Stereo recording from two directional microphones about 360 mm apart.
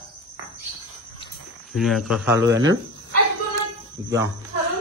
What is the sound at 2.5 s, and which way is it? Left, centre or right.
Speech, right.